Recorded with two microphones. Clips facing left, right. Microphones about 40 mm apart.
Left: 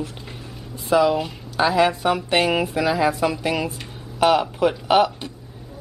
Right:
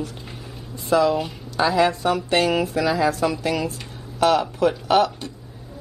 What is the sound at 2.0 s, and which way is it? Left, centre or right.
Speech, centre.